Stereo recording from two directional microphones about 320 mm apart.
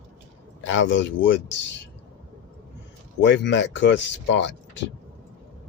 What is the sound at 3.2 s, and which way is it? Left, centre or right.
Speech, left.